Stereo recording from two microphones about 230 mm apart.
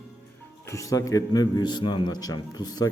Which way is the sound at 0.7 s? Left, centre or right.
Centre.